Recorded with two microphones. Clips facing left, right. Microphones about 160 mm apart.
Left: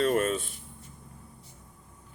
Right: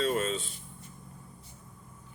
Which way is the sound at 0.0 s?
55° left (ahead or behind).